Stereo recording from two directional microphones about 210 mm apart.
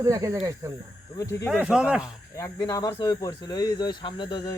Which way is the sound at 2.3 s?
15° left (ahead or behind).